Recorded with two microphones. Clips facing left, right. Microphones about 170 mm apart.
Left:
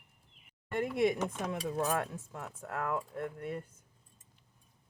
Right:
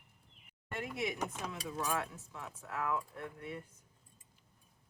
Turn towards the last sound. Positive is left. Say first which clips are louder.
# left 6 dB
turn(degrees=50)  # may be behind; listen again after turning